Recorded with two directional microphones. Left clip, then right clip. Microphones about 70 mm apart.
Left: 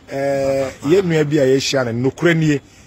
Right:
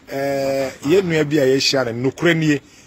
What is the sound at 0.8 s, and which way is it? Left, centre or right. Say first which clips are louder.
Speech: left 1 dB; left.